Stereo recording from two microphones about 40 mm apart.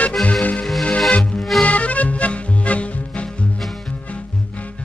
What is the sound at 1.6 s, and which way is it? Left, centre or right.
Music, left.